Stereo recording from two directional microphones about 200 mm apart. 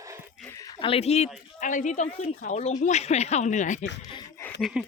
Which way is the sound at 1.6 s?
40° left (ahead or behind).